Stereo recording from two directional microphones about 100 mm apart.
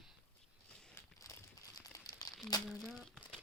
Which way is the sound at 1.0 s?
30° left (ahead or behind).